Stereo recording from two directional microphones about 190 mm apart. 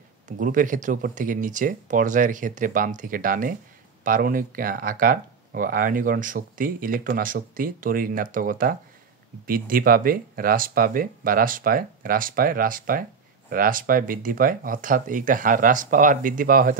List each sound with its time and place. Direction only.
0.4 s speech: 45° right (ahead or behind)